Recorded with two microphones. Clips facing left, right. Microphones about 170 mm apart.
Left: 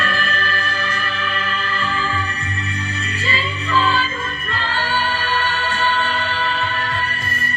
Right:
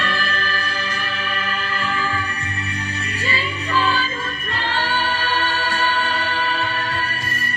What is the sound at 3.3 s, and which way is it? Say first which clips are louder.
Music: left 2 dB; 40° right (ahead or behind).